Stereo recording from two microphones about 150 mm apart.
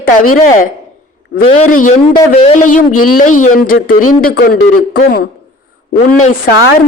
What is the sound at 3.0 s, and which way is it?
A man's voice, 65° left (ahead or behind).